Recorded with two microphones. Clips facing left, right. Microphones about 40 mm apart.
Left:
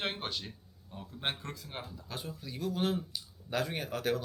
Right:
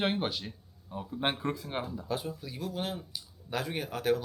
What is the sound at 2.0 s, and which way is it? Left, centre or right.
Speech, centre.